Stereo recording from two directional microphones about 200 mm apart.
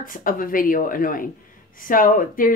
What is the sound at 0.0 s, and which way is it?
A woman's voice, 45° left (ahead or behind).